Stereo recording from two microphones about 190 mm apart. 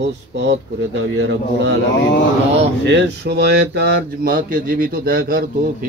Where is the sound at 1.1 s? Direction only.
70° right (ahead or behind).